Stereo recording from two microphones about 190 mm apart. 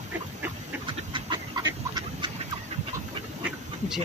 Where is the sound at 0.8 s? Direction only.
25° right (ahead or behind).